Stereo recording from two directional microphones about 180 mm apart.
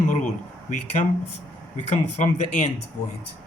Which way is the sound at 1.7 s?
40° left (ahead or behind).